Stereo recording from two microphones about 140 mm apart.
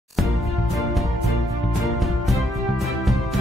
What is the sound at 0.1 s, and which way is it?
Music, centre (ahead or behind).